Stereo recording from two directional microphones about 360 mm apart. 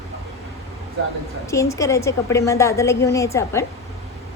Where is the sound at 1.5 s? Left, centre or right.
Centre.